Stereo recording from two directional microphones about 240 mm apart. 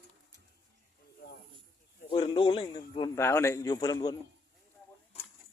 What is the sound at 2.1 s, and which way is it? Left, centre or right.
A man's voice, left.